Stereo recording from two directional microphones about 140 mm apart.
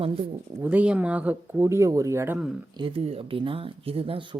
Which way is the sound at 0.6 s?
10° right (ahead or behind).